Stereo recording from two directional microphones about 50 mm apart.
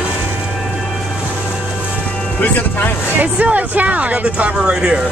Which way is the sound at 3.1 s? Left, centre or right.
Right.